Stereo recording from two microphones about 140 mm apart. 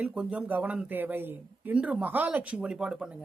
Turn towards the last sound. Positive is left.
turn(degrees=-5)  # may be behind; listen again after turning